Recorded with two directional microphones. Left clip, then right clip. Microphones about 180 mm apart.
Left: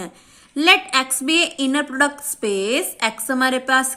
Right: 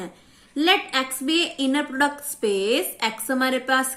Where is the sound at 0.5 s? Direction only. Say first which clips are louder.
Left 5 dB; 30° left (ahead or behind).